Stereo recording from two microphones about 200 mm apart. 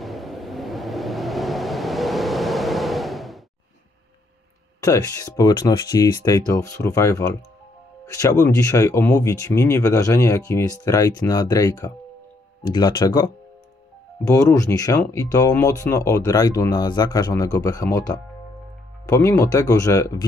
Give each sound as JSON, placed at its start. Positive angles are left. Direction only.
{"t": 0.0, "sound": "vehicle", "side_deg": 0}
{"t": 4.7, "sound": "speech", "side_deg": 15}